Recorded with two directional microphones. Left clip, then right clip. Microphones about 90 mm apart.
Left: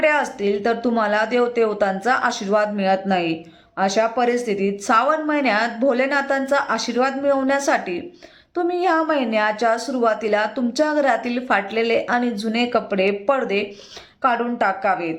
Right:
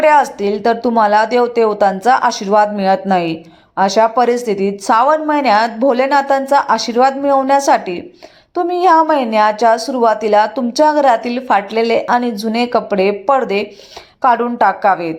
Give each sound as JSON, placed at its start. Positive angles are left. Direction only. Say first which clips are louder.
{"t": 0.0, "sound": "a woman's voice", "louder": "right 8 dB", "side_deg": -25}